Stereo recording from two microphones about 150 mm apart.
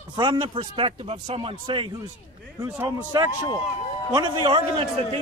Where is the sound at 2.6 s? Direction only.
25° right (ahead or behind).